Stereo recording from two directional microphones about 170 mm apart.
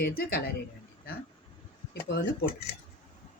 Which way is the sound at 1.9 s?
75° left (ahead or behind).